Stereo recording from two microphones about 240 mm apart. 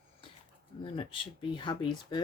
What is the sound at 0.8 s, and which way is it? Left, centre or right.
Speech, left.